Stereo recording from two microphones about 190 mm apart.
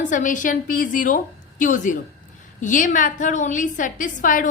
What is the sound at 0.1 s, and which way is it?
A woman's voice, 40° left (ahead or behind).